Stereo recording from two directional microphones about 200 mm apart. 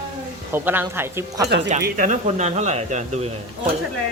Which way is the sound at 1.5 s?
35° right (ahead or behind).